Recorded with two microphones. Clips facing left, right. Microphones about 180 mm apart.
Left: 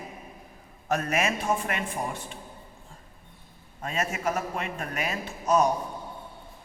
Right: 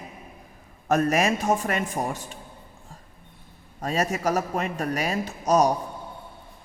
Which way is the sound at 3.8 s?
40° right (ahead or behind).